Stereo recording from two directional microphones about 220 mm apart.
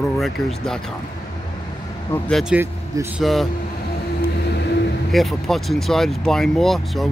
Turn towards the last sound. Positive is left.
turn(degrees=0)  # may be behind; listen again after turning